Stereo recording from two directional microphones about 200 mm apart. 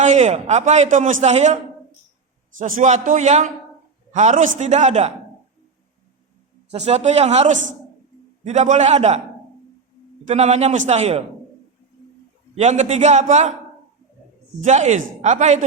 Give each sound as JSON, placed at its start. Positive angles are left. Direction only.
{"t": 0.0, "sound": "a man's voice", "side_deg": -35}
{"t": 2.6, "sound": "a man's voice", "side_deg": -40}
{"t": 6.7, "sound": "a man's voice", "side_deg": -30}
{"t": 10.2, "sound": "a man's voice", "side_deg": -35}
{"t": 12.5, "sound": "a man's voice", "side_deg": -35}
{"t": 14.6, "sound": "a man's voice", "side_deg": -35}